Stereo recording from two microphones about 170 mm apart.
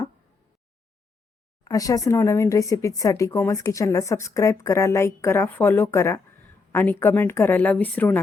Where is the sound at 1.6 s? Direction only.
20° left (ahead or behind).